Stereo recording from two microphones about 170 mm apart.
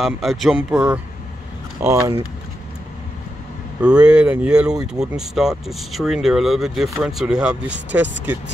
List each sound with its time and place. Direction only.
0.0 s speech: centre (ahead or behind)
1.8 s speech: 20° right (ahead or behind)
3.8 s speech: 5° right (ahead or behind)